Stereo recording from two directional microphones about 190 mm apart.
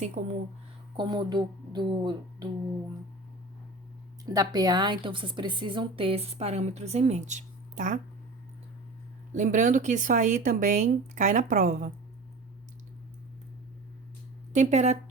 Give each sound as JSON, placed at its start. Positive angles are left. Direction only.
{"t": 0.2, "sound": "speech", "side_deg": -40}
{"t": 0.9, "sound": "a woman's voice", "side_deg": -20}
{"t": 4.3, "sound": "a woman's voice", "side_deg": -20}
{"t": 9.3, "sound": "speech", "side_deg": -40}
{"t": 14.5, "sound": "speech", "side_deg": -35}